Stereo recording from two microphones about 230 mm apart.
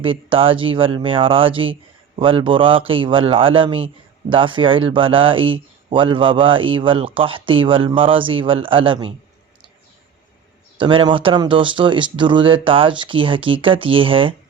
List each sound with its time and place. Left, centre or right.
0.0 s speech: right
10.8 s speech: right